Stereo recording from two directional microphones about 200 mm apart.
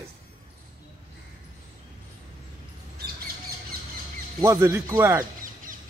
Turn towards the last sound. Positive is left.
turn(degrees=-15)  # may be behind; listen again after turning